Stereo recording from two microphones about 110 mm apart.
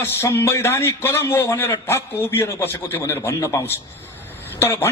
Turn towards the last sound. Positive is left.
turn(degrees=20)  # may be behind; listen again after turning